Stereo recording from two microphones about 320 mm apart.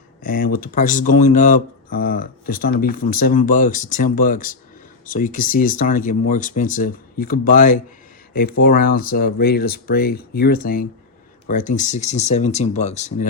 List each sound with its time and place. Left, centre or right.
0.2 s speech: left